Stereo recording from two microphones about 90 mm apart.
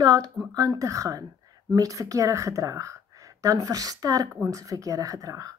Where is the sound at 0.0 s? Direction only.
45° right (ahead or behind).